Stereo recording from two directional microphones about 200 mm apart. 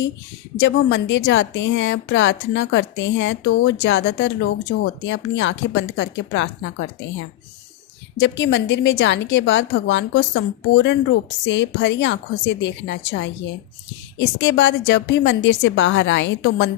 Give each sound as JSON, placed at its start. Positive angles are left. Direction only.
{"t": 0.6, "sound": "a woman's voice", "side_deg": 65}
{"t": 8.2, "sound": "a woman's voice", "side_deg": 65}